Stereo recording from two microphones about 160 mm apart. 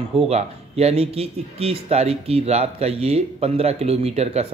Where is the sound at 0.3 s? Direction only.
40° right (ahead or behind).